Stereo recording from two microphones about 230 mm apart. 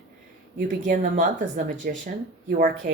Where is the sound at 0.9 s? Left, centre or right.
Right.